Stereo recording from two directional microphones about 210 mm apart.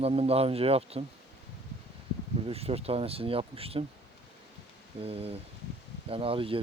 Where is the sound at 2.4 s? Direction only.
30° right (ahead or behind).